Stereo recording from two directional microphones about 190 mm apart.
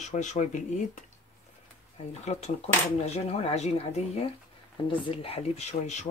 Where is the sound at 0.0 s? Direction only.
40° left (ahead or behind).